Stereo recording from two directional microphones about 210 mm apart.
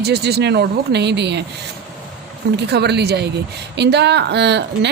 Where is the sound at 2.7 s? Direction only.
50° right (ahead or behind).